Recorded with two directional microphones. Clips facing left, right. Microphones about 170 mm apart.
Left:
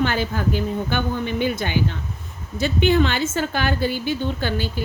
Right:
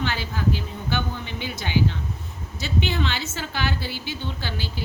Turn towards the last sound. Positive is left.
turn(degrees=50)  # may be behind; listen again after turning